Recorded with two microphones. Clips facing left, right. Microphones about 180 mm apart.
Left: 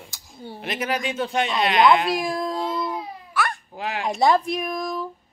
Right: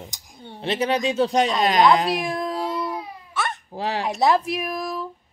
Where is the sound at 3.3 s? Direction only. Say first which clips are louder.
Left 2 dB; 20° right (ahead or behind).